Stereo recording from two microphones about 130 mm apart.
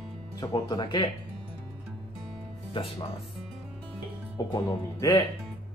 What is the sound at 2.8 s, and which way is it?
Speech, 40° left (ahead or behind).